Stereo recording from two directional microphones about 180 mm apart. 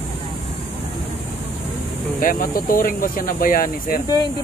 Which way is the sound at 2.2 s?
50° left (ahead or behind).